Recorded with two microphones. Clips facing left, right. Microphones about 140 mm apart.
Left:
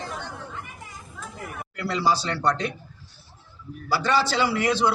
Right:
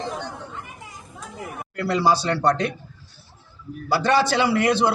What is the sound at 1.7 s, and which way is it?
Speech, 55° right (ahead or behind).